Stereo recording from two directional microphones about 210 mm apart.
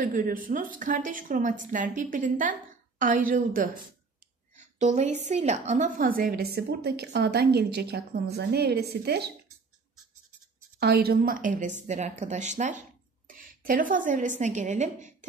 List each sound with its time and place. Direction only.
0.0 s a woman's voice: 40° right (ahead or behind)
10.8 s a woman's voice: 50° right (ahead or behind)